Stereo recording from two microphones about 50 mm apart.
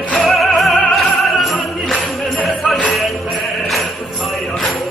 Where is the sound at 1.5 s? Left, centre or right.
Left.